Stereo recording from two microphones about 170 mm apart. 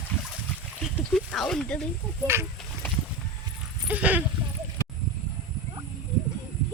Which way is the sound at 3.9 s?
10° right (ahead or behind).